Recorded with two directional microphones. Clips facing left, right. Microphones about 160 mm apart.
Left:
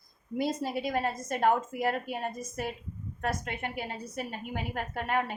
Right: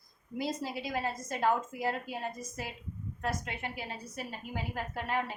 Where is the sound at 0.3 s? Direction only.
55° left (ahead or behind).